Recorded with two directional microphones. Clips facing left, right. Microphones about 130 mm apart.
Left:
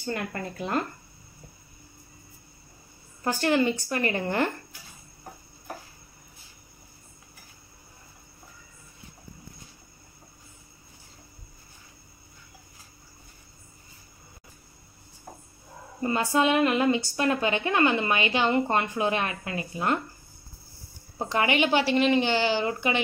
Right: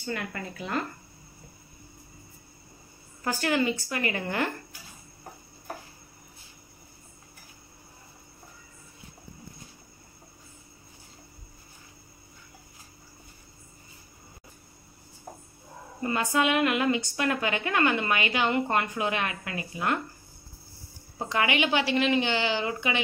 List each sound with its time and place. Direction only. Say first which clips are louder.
0.0 s a woman's voice: left 2 dB; 40° left (ahead or behind)
3.3 s a woman's voice: left 3 dB; 30° left (ahead or behind)
16.0 s a woman's voice: left 2 dB; 30° left (ahead or behind)
21.3 s a woman's voice: left 2 dB; 35° left (ahead or behind)